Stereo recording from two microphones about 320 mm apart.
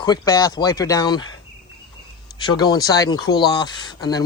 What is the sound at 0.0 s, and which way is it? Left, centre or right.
Speech, centre.